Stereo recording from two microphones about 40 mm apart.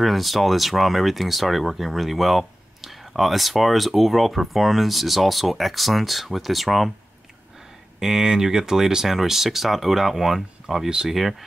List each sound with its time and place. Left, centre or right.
0.0 s speech: centre
8.0 s speech: centre